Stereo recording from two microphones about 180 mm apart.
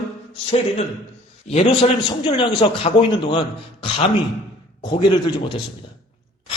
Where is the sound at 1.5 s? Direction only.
35° left (ahead or behind).